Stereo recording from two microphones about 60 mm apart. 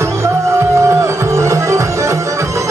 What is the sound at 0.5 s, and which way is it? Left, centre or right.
Music, right.